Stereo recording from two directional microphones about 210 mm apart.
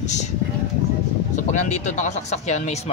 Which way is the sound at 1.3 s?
35° left (ahead or behind).